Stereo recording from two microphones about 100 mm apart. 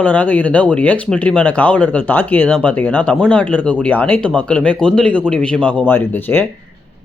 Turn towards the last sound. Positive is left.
turn(degrees=20)  # may be behind; listen again after turning